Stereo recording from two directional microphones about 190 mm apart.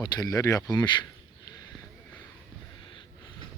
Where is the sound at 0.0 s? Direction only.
20° left (ahead or behind).